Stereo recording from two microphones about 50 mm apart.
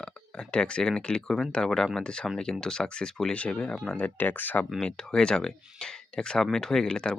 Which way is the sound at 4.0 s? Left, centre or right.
Left.